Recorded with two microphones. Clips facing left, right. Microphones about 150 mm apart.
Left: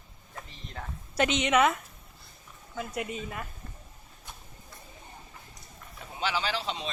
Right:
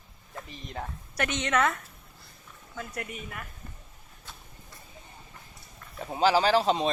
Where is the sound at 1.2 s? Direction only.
20° left (ahead or behind).